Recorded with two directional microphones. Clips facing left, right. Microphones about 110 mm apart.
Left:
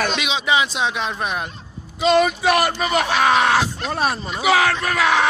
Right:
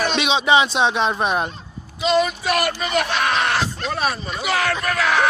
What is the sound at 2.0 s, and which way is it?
Speech, 80° left.